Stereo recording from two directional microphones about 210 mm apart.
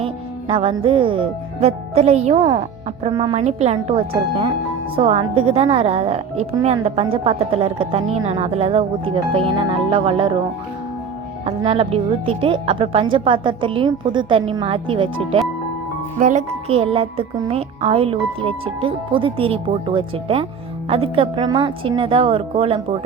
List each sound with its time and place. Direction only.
0.0 s a woman's voice: 25° right (ahead or behind)
11.4 s a woman's voice: 25° right (ahead or behind)
16.1 s a woman's voice: 35° right (ahead or behind)